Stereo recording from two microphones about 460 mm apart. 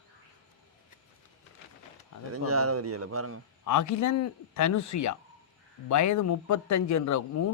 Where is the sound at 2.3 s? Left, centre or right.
Right.